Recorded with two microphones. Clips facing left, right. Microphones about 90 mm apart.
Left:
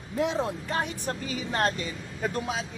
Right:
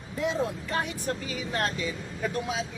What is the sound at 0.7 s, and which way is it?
Speech, 35° left (ahead or behind).